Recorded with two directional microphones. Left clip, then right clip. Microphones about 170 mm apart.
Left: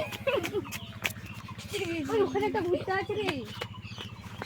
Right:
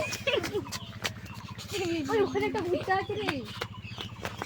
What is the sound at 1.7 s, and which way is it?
Speech, 5° right (ahead or behind).